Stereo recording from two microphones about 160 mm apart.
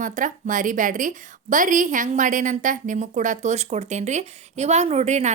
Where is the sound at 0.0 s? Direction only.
55° right (ahead or behind).